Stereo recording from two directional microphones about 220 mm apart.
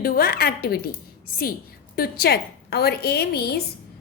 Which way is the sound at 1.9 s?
45° left (ahead or behind).